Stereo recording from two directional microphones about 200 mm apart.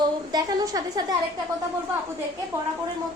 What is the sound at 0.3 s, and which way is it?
Speech, 20° right (ahead or behind).